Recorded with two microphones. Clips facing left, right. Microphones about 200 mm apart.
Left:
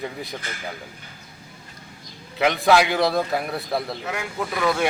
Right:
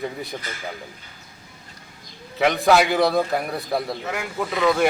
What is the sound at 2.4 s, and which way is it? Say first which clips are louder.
Speech: right 1 dB; centre (ahead or behind).